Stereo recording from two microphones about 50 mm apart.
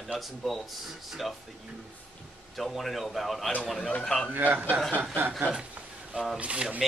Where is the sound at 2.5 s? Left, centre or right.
Centre.